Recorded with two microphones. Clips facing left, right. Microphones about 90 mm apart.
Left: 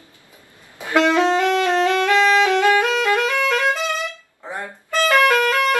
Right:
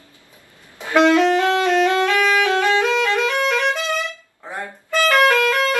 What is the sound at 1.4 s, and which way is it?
Saxophone, 20° right (ahead or behind).